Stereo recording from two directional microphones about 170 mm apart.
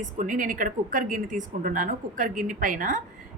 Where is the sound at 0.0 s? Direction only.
50° right (ahead or behind).